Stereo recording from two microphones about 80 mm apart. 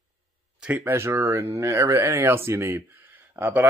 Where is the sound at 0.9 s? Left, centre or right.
Right.